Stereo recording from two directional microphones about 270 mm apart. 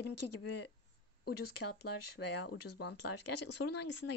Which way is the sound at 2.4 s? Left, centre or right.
Left.